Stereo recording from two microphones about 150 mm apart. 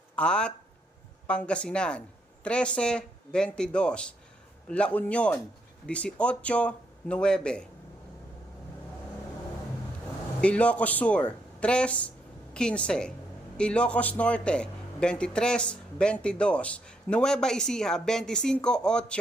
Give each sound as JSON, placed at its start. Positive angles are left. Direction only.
{"t": 0.2, "sound": "a man's voice", "side_deg": 5}
{"t": 10.4, "sound": "a man's voice", "side_deg": 10}